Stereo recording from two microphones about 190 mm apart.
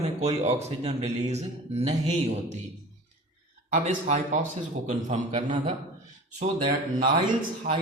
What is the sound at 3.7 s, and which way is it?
Speech, 40° right (ahead or behind).